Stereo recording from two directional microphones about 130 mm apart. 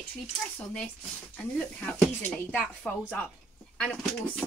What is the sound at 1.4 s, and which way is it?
Speech, 10° left (ahead or behind).